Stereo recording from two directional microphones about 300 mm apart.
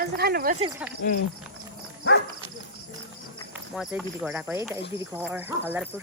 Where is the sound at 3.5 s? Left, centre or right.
Centre.